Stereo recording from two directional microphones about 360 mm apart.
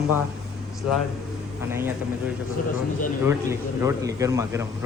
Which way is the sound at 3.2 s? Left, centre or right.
Centre.